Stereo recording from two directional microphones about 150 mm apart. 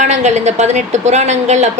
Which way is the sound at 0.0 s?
50° right (ahead or behind).